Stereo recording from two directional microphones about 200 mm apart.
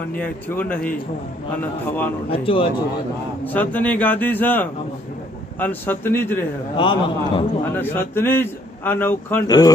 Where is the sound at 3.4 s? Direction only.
10° left (ahead or behind).